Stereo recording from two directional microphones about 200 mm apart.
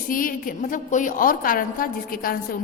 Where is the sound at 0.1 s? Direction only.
45° left (ahead or behind).